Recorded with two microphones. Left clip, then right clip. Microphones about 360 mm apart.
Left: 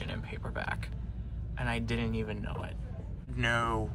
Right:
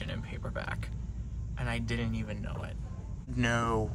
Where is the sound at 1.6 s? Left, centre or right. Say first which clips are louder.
Left 2 dB; centre.